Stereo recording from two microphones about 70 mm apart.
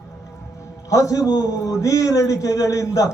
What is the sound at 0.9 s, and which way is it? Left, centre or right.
A man's voice, left.